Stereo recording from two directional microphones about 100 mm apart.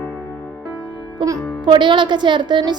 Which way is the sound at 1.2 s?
50° right (ahead or behind).